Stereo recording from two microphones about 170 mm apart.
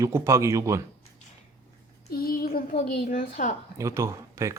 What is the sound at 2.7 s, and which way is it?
Speech, 50° left (ahead or behind).